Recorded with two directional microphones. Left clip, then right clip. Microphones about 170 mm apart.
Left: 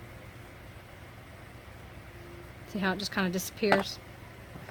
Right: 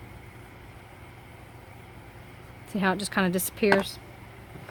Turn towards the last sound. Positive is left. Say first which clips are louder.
# right 5 dB
turn(degrees=-60)  # may be behind; listen again after turning